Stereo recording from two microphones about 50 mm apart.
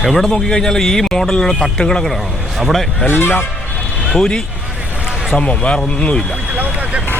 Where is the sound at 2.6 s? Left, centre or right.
Centre.